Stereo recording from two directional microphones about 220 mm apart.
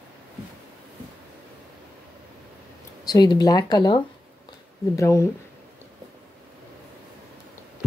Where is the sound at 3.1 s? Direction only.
20° left (ahead or behind).